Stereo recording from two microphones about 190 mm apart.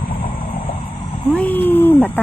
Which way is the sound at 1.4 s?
10° left (ahead or behind).